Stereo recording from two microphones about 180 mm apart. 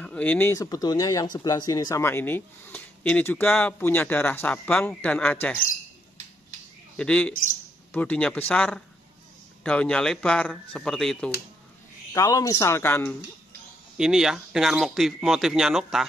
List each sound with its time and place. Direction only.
0.0 s speech: 10° left (ahead or behind)
7.0 s speech: 5° left (ahead or behind)
12.1 s speech: 15° left (ahead or behind)
13.9 s speech: 5° right (ahead or behind)